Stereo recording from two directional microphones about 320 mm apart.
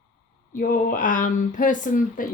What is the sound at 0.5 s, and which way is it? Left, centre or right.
Speech, left.